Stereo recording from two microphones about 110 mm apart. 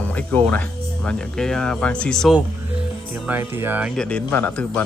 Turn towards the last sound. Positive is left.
turn(degrees=15)  # may be behind; listen again after turning